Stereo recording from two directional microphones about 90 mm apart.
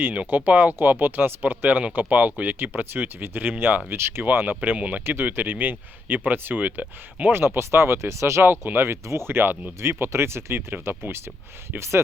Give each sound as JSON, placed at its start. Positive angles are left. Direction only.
{"t": 0.0, "sound": "speech", "side_deg": -20}